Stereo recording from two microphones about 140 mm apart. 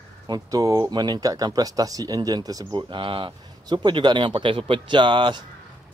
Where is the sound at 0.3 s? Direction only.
25° right (ahead or behind).